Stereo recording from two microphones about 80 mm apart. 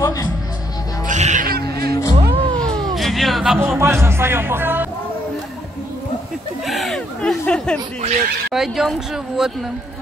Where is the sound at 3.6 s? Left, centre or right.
Right.